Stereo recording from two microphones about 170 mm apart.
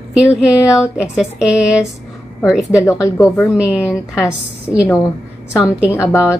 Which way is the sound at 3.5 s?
5° right (ahead or behind).